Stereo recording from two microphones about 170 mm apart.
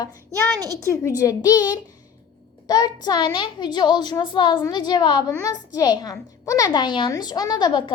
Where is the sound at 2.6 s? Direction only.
25° left (ahead or behind).